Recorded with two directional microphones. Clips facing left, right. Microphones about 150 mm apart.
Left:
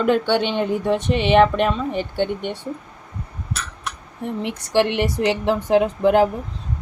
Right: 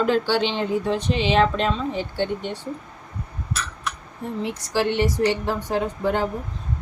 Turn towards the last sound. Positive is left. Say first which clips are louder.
# left 7 dB
turn(degrees=85)